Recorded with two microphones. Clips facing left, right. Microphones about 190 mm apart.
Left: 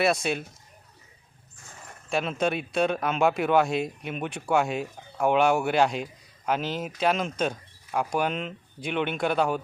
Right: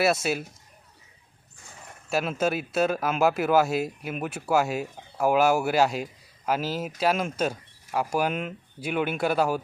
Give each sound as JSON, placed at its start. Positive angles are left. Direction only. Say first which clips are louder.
{"t": 0.0, "sound": "speech", "louder": "right 1 dB", "side_deg": -5}
{"t": 2.0, "sound": "speech", "louder": "right 1 dB", "side_deg": -5}